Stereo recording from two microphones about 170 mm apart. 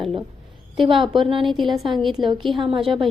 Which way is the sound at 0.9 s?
30° right (ahead or behind).